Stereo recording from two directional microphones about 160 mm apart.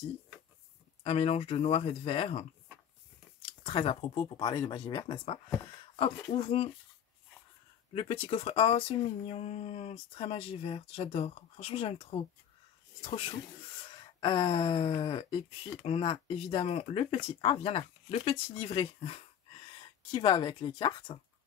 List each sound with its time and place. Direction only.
1.0 s speech: 40° left (ahead or behind)
3.6 s speech: 35° left (ahead or behind)
7.9 s speech: 35° left (ahead or behind)